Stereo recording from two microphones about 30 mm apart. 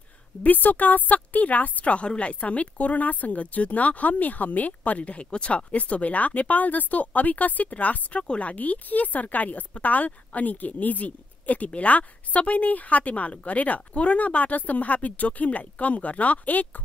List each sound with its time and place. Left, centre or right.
0.4 s speech: left
2.0 s speech: left
8.2 s speech: left
8.5 s speech: left